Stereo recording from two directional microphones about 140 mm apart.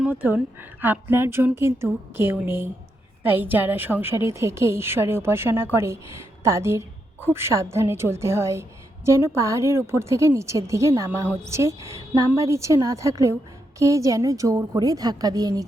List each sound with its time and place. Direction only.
0.0 s a woman's voice: 10° right (ahead or behind); by 15.6 s 25° right (ahead or behind)